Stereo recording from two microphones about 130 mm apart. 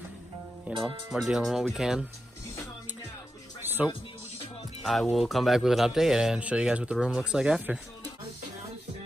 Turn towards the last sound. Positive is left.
turn(degrees=-10)  # may be behind; listen again after turning